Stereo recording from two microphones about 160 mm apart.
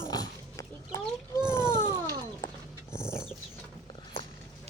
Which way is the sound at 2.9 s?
15° left (ahead or behind).